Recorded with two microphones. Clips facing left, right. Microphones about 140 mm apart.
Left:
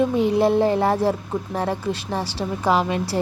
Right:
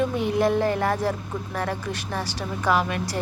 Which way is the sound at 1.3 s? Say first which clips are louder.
Left 5 dB; 25° left (ahead or behind).